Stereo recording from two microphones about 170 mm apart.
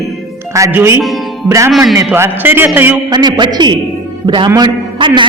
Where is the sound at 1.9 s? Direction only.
15° right (ahead or behind).